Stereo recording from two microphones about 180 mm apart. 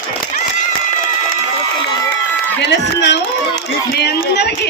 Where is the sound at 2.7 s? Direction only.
75° left (ahead or behind).